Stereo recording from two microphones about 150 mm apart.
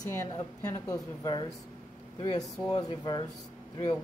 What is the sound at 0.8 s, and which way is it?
Speech, 25° left (ahead or behind).